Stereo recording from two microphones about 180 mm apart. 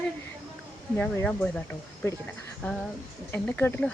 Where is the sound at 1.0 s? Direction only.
5° left (ahead or behind).